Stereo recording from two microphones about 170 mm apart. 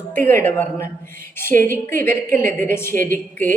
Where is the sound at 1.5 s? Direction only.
55° right (ahead or behind).